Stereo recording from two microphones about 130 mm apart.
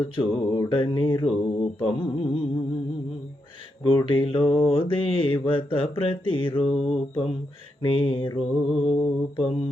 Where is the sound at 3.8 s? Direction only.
40° left (ahead or behind).